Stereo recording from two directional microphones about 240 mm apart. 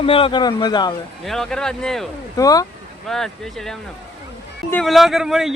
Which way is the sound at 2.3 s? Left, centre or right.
Centre.